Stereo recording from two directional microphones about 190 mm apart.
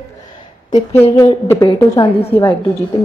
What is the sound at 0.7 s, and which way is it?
A woman's voice, 20° left (ahead or behind).